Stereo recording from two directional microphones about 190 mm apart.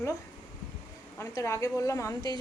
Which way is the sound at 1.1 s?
15° left (ahead or behind).